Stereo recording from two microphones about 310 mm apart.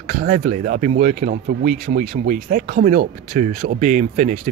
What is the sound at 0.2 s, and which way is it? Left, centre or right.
Speech, right.